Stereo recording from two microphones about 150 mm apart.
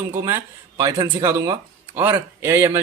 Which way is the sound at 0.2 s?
20° right (ahead or behind).